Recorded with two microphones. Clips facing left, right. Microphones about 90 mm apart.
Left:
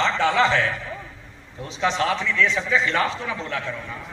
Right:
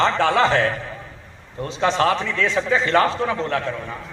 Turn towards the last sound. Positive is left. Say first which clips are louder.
# right 6 dB
turn(degrees=-45)  # may be behind; listen again after turning